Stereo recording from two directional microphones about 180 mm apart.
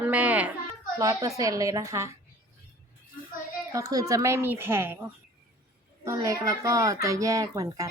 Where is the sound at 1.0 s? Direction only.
20° right (ahead or behind).